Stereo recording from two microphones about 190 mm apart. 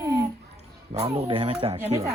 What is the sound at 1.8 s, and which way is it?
Speech, 15° right (ahead or behind).